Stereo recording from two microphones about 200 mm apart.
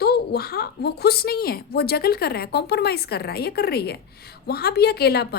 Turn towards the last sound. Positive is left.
turn(degrees=55)  # may be behind; listen again after turning